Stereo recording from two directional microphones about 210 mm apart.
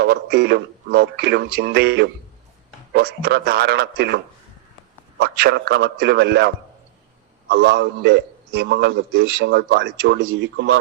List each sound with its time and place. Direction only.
0.0 s speech: 50° right (ahead or behind)
5.2 s speech: 45° right (ahead or behind)
7.5 s a man's voice: 55° right (ahead or behind)